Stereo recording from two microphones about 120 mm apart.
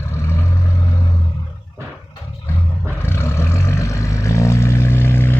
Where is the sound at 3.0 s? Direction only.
20° left (ahead or behind).